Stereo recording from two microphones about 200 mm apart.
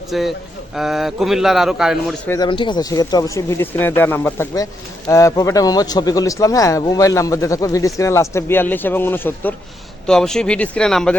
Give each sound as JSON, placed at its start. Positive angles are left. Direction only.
{"t": 0.1, "sound": "a man's voice", "side_deg": 0}
{"t": 2.2, "sound": "speech", "side_deg": 15}
{"t": 2.5, "sound": "a man's voice", "side_deg": 25}